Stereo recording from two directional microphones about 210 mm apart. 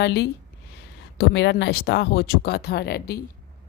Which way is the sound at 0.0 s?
50° left (ahead or behind).